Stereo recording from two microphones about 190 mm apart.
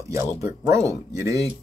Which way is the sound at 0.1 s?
15° right (ahead or behind).